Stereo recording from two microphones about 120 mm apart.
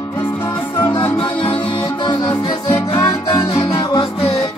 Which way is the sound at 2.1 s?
35° left (ahead or behind).